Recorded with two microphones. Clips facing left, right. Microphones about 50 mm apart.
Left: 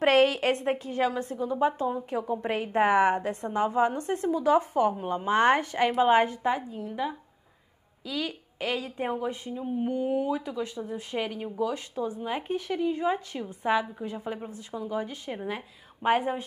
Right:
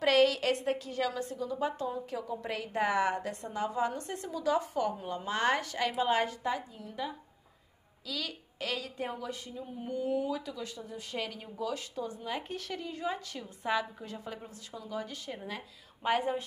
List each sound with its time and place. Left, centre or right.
0.0 s a woman's voice: left
8.1 s a woman's voice: left